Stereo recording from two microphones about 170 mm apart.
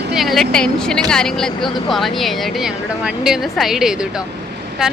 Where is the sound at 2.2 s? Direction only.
Centre (ahead or behind).